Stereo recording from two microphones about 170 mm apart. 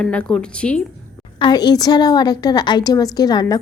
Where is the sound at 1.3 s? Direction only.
25° left (ahead or behind).